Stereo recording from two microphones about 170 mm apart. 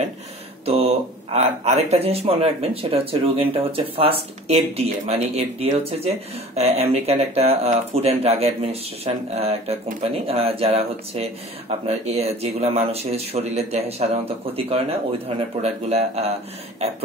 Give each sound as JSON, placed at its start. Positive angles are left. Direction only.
{"t": 0.7, "sound": "speech", "side_deg": -35}